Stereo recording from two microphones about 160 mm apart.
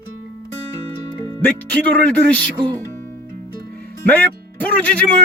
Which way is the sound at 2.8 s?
15° left (ahead or behind).